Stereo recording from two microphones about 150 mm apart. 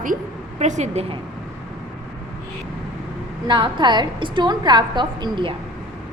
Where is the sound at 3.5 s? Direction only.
30° right (ahead or behind).